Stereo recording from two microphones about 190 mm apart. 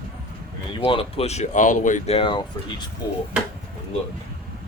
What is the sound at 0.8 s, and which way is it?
Speech, 30° left (ahead or behind).